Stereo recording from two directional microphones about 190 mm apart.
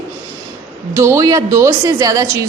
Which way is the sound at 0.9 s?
15° right (ahead or behind).